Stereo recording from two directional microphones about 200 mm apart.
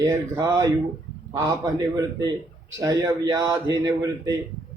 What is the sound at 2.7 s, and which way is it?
A man's voice, 15° right (ahead or behind).